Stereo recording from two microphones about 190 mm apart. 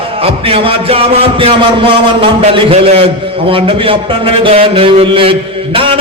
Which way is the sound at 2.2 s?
30° right (ahead or behind).